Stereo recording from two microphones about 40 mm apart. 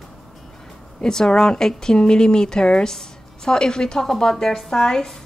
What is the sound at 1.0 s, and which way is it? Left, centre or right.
Speech, centre.